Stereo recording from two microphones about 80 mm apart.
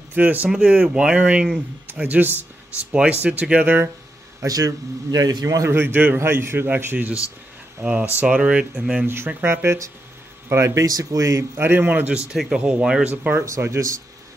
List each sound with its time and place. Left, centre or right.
0.1 s speech: right
0.5 s speech: centre; by 3.9 s right
4.5 s a man's voice: right
5.6 s speech: right; by 9.0 s centre
9.0 s a man's voice: right
11.5 s speech: right
12.3 s speech: centre
13.1 s speech: right
13.5 s speech: right